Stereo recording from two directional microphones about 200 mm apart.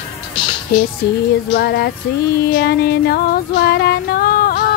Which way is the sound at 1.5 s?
55° left (ahead or behind).